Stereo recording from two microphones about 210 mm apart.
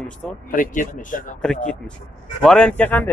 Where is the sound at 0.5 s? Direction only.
40° left (ahead or behind).